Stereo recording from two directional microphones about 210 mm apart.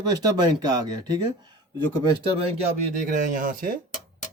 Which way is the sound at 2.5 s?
35° right (ahead or behind).